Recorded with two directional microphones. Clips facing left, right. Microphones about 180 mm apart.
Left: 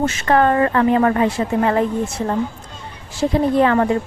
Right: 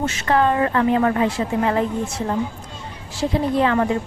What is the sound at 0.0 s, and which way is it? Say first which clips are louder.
Speech: left 3 dB; 55° left (ahead or behind).